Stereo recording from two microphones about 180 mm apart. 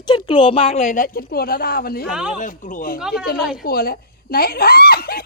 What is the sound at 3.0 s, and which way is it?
Speech, 5° right (ahead or behind).